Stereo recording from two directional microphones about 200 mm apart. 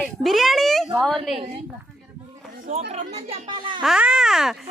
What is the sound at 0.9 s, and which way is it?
Speech, centre (ahead or behind).